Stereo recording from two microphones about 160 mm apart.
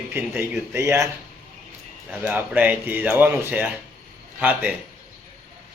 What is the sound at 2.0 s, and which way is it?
Speech, 5° right (ahead or behind).